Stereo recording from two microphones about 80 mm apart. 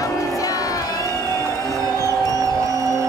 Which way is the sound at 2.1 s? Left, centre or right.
Right.